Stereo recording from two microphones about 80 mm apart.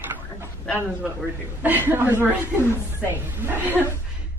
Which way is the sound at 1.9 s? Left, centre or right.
Right.